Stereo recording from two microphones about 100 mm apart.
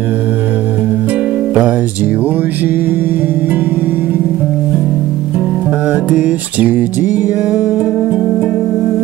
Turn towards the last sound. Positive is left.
turn(degrees=-20)  # may be behind; listen again after turning